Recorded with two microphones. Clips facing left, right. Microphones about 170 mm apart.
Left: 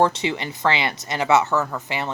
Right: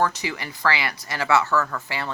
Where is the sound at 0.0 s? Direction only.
25° left (ahead or behind).